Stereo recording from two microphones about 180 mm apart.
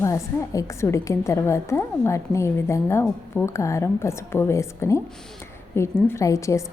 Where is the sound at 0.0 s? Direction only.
15° left (ahead or behind).